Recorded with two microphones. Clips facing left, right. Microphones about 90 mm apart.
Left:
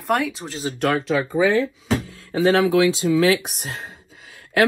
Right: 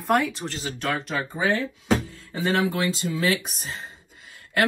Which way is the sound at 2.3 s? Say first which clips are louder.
Left 7 dB; 80° left.